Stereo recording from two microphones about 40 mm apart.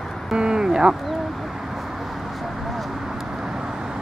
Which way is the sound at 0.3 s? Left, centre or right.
Centre.